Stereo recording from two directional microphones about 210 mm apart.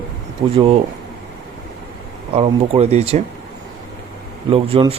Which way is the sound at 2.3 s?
30° right (ahead or behind).